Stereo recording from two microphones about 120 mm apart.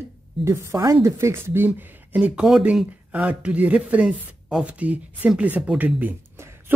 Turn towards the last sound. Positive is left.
turn(degrees=-20)  # may be behind; listen again after turning